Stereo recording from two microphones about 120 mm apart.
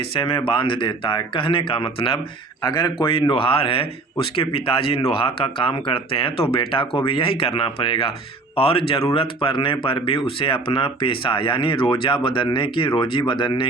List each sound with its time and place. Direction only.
0.0 s speech: 45° left (ahead or behind)